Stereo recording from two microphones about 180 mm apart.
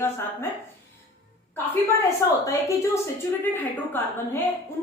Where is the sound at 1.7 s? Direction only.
15° left (ahead or behind).